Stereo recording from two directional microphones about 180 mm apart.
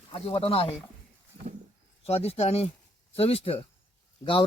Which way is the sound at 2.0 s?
35° left (ahead or behind).